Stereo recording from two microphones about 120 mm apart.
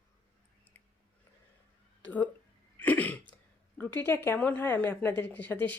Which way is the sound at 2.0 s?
10° left (ahead or behind).